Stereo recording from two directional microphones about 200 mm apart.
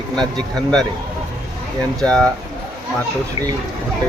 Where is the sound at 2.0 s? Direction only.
5° left (ahead or behind).